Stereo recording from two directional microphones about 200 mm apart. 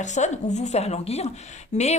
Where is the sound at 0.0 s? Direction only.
35° left (ahead or behind).